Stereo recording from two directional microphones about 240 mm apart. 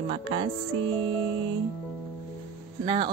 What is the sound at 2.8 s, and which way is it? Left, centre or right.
Speech, right.